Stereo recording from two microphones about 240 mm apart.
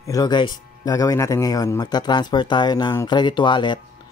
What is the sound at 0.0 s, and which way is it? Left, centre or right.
Speech, centre.